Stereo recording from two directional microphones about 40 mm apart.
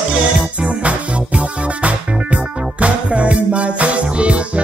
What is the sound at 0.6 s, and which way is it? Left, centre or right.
Music, right.